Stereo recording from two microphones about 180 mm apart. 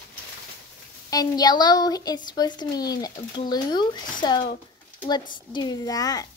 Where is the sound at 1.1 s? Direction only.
20° left (ahead or behind).